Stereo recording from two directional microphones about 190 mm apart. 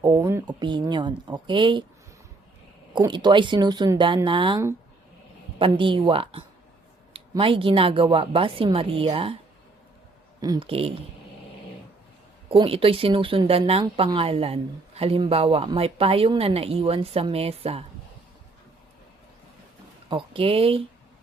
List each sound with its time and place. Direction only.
0.0 s a woman's voice: 20° right (ahead or behind)
2.9 s a woman's voice: 25° right (ahead or behind)
10.4 s a woman's voice: 25° right (ahead or behind)
12.5 s speech: 30° right (ahead or behind)
20.1 s speech: 30° right (ahead or behind)